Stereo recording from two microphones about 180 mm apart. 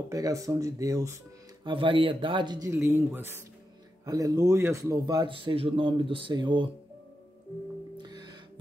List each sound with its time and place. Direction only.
0.1 s a man's voice: 20° right (ahead or behind)
8.0 s music: 25° right (ahead or behind)